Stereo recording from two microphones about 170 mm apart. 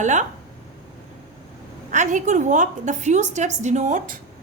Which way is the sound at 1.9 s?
45° right (ahead or behind).